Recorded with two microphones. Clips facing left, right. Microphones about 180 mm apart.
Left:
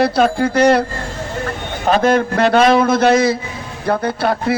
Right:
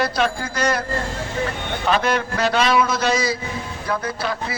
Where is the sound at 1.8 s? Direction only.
45° left (ahead or behind).